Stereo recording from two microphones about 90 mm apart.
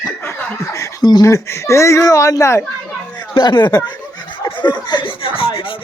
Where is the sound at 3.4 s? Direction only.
55° left (ahead or behind).